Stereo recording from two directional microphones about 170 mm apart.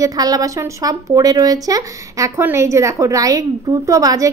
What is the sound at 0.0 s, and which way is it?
Speech, 20° right (ahead or behind).